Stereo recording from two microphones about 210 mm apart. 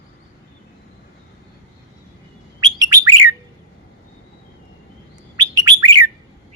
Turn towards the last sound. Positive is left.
turn(degrees=-20)  # may be behind; listen again after turning